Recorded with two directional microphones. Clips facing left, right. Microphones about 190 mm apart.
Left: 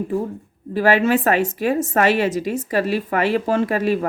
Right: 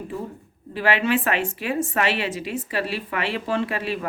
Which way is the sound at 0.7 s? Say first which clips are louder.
Left 5 dB; 40° left (ahead or behind).